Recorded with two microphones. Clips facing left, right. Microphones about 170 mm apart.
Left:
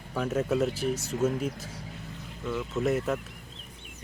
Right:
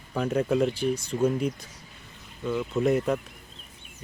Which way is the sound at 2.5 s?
15° right (ahead or behind).